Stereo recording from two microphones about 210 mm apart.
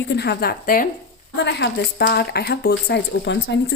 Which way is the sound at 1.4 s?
55° left (ahead or behind).